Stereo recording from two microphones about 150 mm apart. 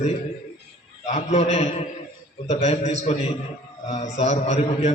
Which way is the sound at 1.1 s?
45° left (ahead or behind).